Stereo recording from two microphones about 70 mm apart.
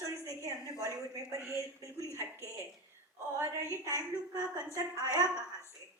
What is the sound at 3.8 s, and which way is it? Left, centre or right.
A woman's voice, left.